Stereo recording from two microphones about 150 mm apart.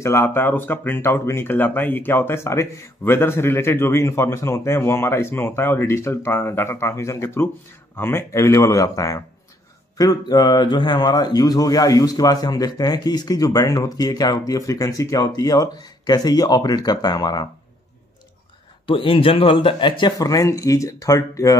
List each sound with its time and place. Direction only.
0.0 s speech: 15° left (ahead or behind)
18.9 s speech: 35° left (ahead or behind); by 21.5 s 20° left (ahead or behind)